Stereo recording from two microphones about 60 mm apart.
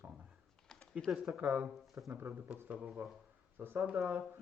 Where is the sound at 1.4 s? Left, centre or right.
Right.